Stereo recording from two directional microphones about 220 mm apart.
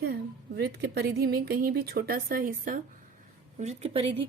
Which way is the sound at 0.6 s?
50° right (ahead or behind).